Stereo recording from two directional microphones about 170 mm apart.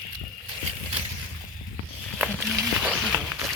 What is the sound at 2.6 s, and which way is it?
Music, 10° right (ahead or behind).